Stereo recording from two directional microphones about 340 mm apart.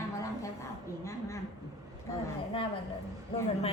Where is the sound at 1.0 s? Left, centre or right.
Centre.